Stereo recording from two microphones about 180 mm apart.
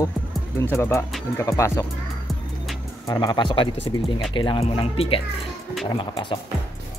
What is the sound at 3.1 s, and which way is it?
Speech, 25° left (ahead or behind).